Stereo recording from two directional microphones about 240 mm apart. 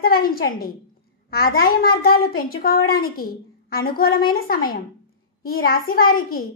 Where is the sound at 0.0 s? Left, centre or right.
Left.